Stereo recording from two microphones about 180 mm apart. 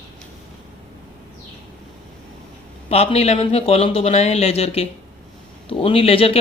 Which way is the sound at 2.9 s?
35° left (ahead or behind).